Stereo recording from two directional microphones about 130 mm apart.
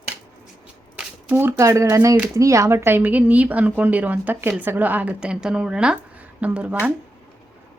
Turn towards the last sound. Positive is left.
turn(degrees=-10)  # may be behind; listen again after turning